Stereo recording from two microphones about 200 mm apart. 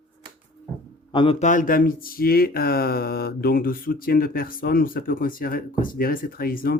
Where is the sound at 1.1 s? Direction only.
25° left (ahead or behind).